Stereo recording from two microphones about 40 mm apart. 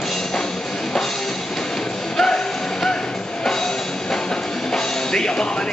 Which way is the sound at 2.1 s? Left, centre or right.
Centre.